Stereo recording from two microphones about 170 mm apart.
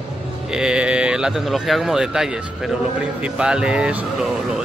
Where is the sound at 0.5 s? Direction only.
5° right (ahead or behind).